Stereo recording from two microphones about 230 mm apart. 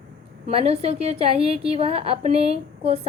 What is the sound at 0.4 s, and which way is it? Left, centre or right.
A woman's voice, right.